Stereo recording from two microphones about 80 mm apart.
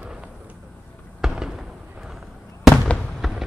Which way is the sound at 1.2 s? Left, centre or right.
Centre.